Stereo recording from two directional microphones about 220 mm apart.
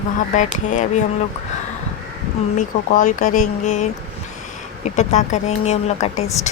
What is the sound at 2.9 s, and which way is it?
Speech, 35° left (ahead or behind).